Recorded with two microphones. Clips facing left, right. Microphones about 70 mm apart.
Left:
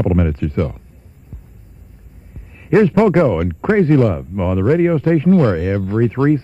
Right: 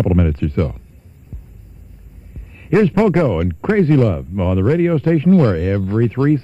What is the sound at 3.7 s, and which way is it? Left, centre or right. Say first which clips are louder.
Speech: left 1 dB; centre.